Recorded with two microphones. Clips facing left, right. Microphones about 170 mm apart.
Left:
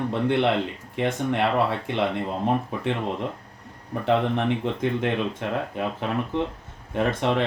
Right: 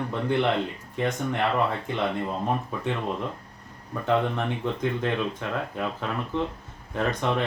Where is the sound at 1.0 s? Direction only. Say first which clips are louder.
Left 2 dB; 25° left (ahead or behind).